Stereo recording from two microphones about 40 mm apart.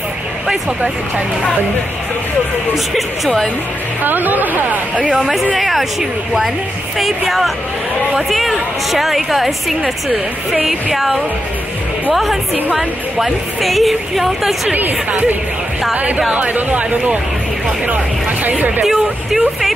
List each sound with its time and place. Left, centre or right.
2.9 s speech: centre
4.0 s speech: right
5.1 s a woman's voice: centre
14.7 s speech: right
18.4 s speech: right
18.9 s vehicle: centre